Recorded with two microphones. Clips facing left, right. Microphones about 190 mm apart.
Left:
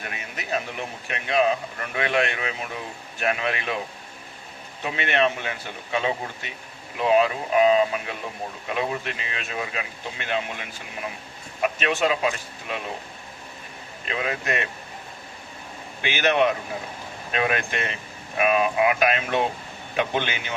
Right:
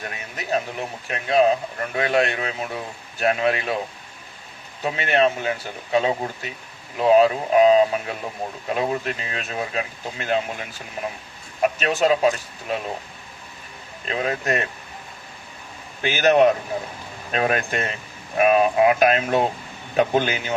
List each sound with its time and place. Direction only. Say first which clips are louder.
0.0 s a man's voice: right 2 dB; 35° right (ahead or behind)
4.8 s speech: right 3 dB; 40° right (ahead or behind)
14.0 s speech: right 3 dB; 40° right (ahead or behind)
16.0 s speech: right 5 dB; 40° right (ahead or behind)